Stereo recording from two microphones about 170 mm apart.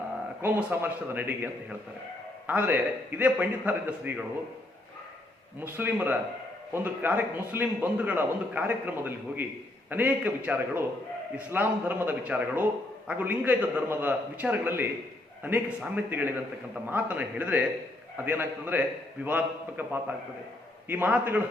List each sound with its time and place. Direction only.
0.4 s a man's voice: 10° right (ahead or behind)
2.5 s a man's voice: 10° right (ahead or behind)
5.5 s a man's voice: 10° right (ahead or behind)